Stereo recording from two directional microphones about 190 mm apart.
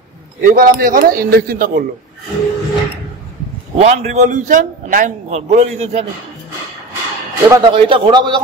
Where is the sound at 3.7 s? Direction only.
35° right (ahead or behind).